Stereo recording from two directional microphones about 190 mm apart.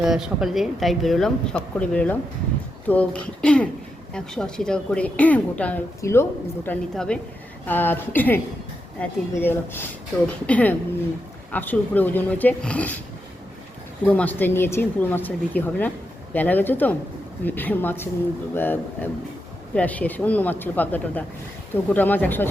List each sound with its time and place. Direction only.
0.0 s a woman's voice: 5° right (ahead or behind)
14.0 s a woman's voice: 10° left (ahead or behind)